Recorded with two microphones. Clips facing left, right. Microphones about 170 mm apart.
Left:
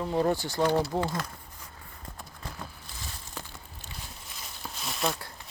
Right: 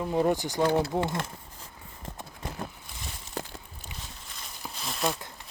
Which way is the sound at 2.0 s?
20° right (ahead or behind).